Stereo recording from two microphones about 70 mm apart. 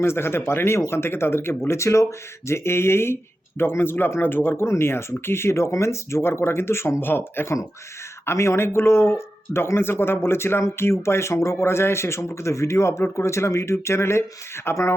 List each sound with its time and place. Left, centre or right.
0.0 s speech: left